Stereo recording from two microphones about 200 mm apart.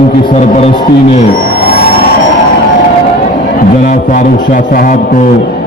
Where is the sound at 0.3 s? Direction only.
30° left (ahead or behind).